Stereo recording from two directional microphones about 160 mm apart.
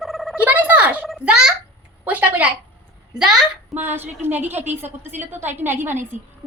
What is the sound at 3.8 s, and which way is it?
Speech, 10° right (ahead or behind).